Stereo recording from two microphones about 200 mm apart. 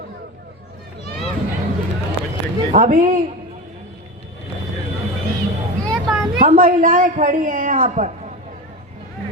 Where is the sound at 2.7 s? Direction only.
40° right (ahead or behind).